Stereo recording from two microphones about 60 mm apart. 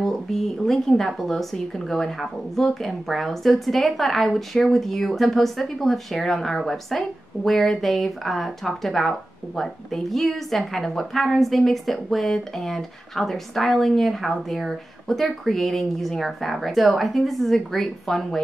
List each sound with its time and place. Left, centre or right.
0.0 s speech: centre